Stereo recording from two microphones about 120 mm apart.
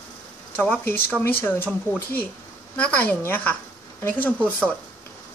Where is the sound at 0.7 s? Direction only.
15° left (ahead or behind).